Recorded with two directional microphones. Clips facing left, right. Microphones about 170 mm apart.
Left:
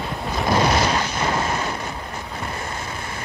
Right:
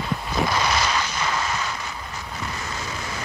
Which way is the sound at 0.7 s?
55° left (ahead or behind).